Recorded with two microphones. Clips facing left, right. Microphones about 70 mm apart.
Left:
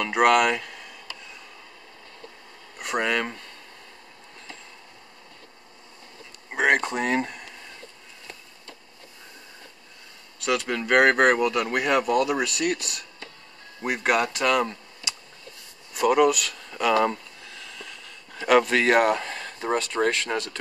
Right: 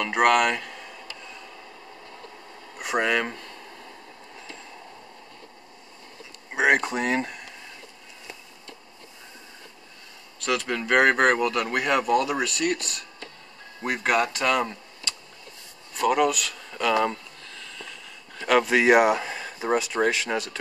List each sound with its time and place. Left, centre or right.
0.0 s speech: centre
2.8 s speech: centre
6.5 s speech: centre
10.4 s speech: centre
15.1 s a sound: centre
15.9 s a sound: centre
18.8 s speech: centre